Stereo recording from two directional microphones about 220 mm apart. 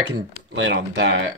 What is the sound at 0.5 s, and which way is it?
Speech, 55° right (ahead or behind).